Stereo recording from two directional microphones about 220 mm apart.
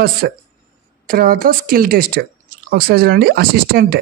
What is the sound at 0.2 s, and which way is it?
Speech, 45° right (ahead or behind).